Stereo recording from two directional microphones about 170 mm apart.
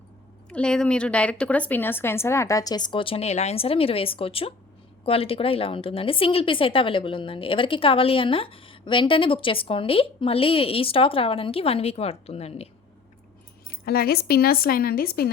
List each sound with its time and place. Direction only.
0.5 s a woman's voice: 5° left (ahead or behind); by 12.6 s 35° left (ahead or behind)
13.8 s a woman's voice: 65° left (ahead or behind)